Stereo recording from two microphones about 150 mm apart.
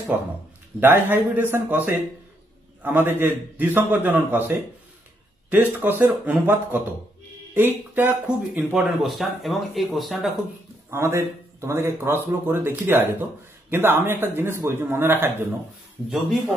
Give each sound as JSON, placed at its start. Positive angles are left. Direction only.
{"t": 0.7, "sound": "speech", "side_deg": -15}
{"t": 10.9, "sound": "speech", "side_deg": -15}